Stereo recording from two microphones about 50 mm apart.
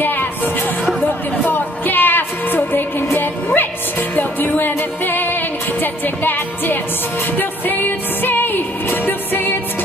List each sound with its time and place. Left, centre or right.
1.4 s music: left